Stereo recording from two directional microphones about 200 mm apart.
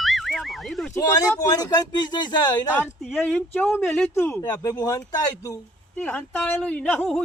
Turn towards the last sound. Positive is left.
turn(degrees=5)  # may be behind; listen again after turning